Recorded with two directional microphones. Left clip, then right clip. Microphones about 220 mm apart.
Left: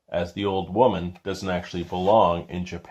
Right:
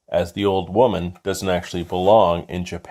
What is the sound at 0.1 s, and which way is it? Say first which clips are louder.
Speech: right 6 dB; 40° right (ahead or behind).